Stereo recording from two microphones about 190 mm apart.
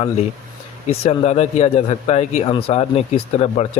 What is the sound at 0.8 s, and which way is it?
Speech, 35° left (ahead or behind).